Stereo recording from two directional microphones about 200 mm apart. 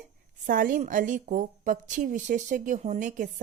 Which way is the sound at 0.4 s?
40° right (ahead or behind).